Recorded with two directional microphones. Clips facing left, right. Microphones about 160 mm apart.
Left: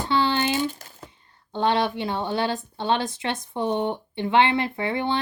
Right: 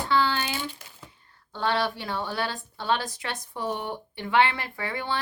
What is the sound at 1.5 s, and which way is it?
Speech, 20° left (ahead or behind).